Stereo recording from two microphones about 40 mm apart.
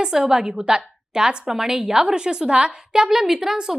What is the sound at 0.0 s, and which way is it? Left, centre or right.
A woman's voice, centre.